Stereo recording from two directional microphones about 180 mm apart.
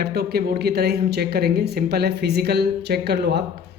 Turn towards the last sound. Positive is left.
turn(degrees=-65)  # may be behind; listen again after turning